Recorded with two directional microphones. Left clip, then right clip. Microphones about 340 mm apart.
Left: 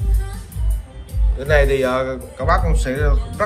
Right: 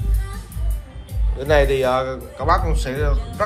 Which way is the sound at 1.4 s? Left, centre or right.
Centre.